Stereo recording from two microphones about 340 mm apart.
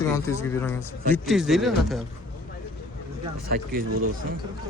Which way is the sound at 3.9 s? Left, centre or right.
Right.